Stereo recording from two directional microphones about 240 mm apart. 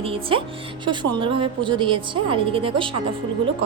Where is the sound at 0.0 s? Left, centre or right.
Right.